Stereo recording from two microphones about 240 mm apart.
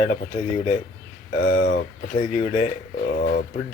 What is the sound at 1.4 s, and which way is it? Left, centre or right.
Speech, left.